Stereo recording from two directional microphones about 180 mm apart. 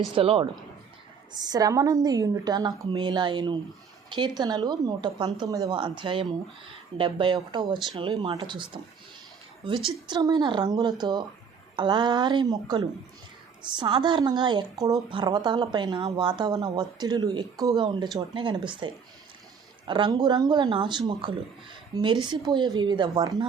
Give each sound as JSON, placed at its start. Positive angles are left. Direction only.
{"t": 0.1, "sound": "a woman's voice", "side_deg": -30}
{"t": 19.9, "sound": "a woman's voice", "side_deg": -25}